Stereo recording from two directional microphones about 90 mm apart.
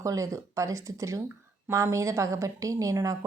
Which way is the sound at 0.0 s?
40° right (ahead or behind).